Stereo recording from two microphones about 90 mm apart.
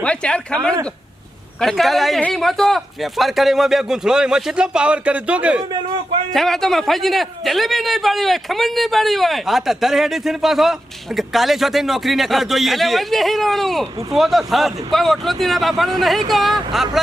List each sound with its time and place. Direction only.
0.0 s a man's voice: 10° left (ahead or behind); by 5.6 s 15° right (ahead or behind)
6.3 s a man's voice: 5° left (ahead or behind)